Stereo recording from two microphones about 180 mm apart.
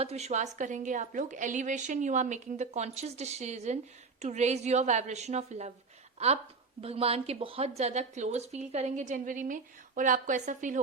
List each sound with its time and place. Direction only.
0.0 s a woman's voice: 35° right (ahead or behind)